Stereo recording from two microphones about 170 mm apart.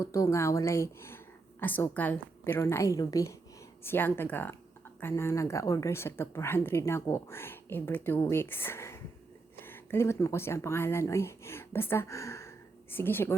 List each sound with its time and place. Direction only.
0.0 s a woman's voice: 20° left (ahead or behind)